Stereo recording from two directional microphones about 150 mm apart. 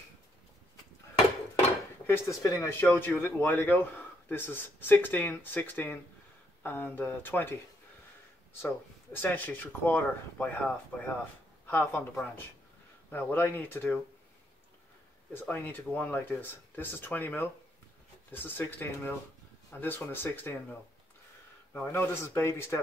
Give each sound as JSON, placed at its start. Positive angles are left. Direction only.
{"t": 2.0, "sound": "a man's voice", "side_deg": 15}
{"t": 8.5, "sound": "a man's voice", "side_deg": 15}
{"t": 15.3, "sound": "a man's voice", "side_deg": 10}
{"t": 21.7, "sound": "a man's voice", "side_deg": 15}